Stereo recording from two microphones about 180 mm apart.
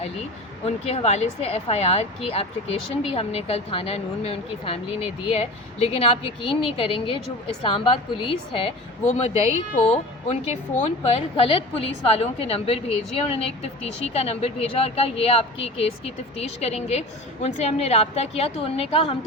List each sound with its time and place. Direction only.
0.6 s a woman's voice: 35° left (ahead or behind)